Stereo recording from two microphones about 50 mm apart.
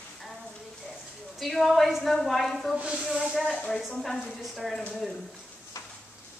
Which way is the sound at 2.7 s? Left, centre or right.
Centre.